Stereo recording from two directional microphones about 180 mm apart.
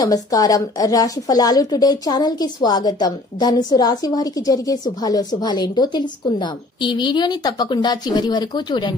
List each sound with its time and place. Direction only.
0.0 s a woman's voice: 20° left (ahead or behind)